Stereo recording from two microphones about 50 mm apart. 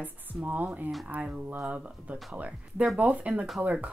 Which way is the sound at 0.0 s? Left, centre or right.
Right.